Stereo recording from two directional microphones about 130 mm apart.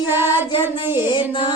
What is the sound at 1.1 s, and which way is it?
Child singing, 40° left (ahead or behind).